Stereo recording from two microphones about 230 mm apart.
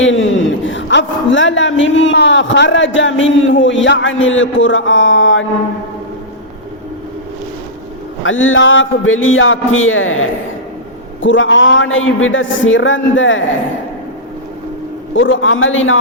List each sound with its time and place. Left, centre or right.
0.0 s a man's voice: left
8.2 s a man's voice: left
15.1 s a man's voice: left